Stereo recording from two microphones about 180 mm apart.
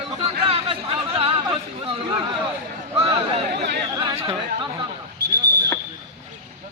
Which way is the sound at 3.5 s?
65° right (ahead or behind).